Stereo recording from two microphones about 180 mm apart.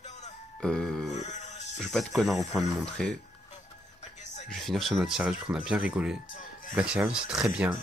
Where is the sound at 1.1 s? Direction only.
40° left (ahead or behind).